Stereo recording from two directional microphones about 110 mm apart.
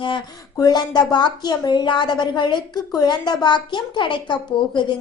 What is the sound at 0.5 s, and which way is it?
A woman's voice, 40° left (ahead or behind).